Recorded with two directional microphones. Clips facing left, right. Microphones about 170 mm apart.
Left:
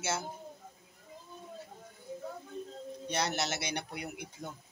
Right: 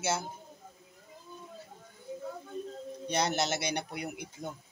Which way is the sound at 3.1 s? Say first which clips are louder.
Right 4 dB; 20° right (ahead or behind).